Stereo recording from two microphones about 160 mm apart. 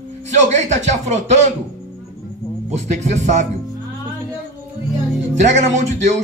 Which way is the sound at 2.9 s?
50° right (ahead or behind).